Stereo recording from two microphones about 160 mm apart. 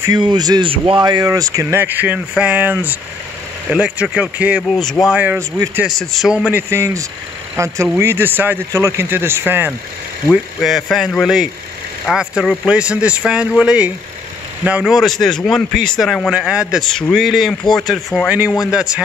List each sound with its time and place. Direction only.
0.0 s speech: 25° right (ahead or behind); by 5.1 s centre (ahead or behind)
5.1 s a man's voice: 10° right (ahead or behind)
6.7 s speech: 20° right (ahead or behind)
10.3 s a man's voice: centre (ahead or behind)